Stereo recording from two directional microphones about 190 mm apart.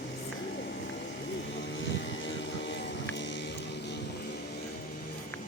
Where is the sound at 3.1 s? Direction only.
70° left (ahead or behind).